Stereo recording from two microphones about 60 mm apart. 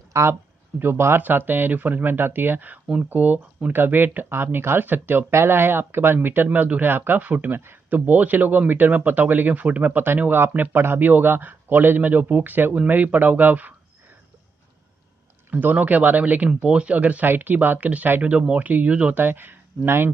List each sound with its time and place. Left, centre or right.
0.3 s speech: right
15.5 s speech: right
19.1 s speech: right